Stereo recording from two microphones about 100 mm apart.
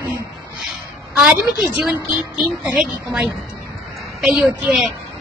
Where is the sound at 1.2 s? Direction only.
5° right (ahead or behind).